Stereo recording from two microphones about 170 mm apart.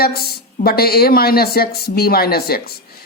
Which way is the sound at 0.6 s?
65° left (ahead or behind).